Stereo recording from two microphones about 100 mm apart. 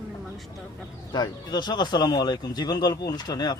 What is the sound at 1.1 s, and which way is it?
A man's voice, 45° left (ahead or behind).